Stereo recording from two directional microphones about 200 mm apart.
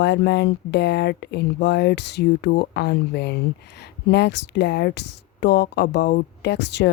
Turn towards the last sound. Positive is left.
turn(degrees=60)  # may be behind; listen again after turning